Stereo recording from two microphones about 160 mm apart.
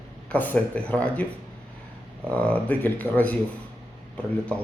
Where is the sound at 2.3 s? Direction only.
10° left (ahead or behind).